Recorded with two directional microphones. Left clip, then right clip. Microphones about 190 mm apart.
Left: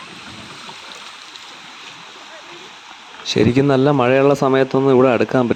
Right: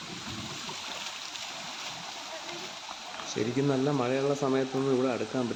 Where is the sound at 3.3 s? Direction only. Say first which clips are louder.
Left 15 dB; 55° left (ahead or behind).